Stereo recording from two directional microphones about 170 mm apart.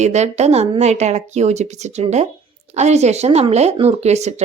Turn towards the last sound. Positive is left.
turn(degrees=-40)  # may be behind; listen again after turning